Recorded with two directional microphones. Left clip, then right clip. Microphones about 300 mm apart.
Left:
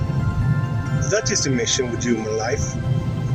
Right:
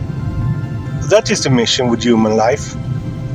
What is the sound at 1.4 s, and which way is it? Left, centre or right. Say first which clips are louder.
Speech: right 7 dB; right.